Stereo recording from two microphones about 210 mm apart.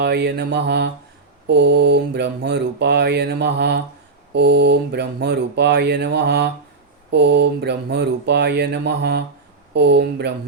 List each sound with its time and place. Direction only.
0.0 s mantra: 55° right (ahead or behind)